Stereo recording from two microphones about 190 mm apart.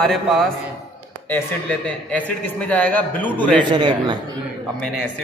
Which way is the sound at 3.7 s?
25° right (ahead or behind).